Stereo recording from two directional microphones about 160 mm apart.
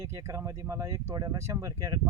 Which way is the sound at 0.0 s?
15° right (ahead or behind).